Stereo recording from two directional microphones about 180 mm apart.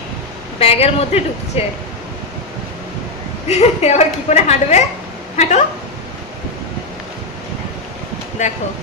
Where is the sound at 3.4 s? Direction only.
40° left (ahead or behind).